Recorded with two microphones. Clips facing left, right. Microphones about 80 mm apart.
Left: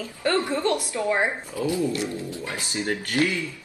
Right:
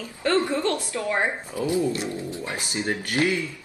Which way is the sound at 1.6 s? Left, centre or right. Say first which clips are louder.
Right 1 dB; right.